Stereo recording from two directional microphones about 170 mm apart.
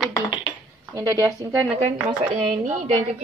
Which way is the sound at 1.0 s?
20° right (ahead or behind).